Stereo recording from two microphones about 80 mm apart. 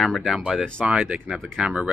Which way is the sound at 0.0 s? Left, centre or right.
Centre.